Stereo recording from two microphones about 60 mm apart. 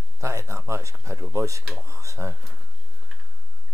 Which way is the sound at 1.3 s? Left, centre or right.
Right.